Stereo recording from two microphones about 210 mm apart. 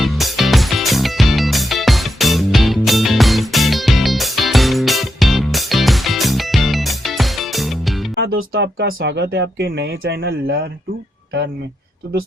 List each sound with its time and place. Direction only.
0.0 s music: centre (ahead or behind)
8.2 s speech: 55° right (ahead or behind)